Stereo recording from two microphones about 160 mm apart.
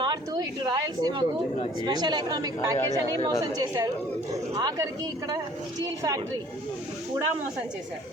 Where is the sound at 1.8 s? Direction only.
25° right (ahead or behind).